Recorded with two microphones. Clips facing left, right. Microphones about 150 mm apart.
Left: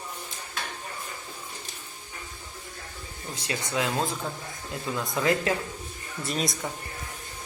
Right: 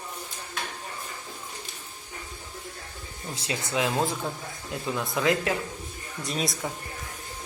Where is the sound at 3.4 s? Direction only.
20° right (ahead or behind).